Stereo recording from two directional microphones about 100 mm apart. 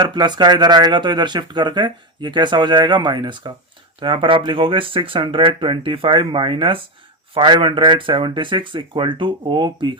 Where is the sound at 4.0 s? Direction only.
60° right (ahead or behind).